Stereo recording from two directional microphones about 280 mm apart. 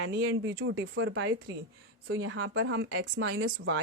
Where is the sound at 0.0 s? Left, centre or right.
Right.